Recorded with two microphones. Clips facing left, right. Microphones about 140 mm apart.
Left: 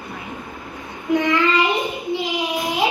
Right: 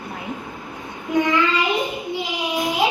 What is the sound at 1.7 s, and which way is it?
Child singing, centre (ahead or behind).